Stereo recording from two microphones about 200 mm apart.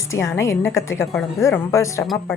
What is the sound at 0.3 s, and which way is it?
A woman's voice, 15° left (ahead or behind).